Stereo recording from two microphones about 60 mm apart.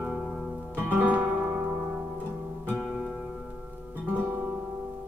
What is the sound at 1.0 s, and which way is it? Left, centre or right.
Music, right.